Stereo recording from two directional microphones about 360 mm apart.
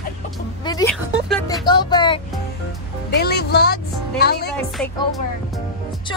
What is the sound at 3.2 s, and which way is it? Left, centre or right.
Speech, left.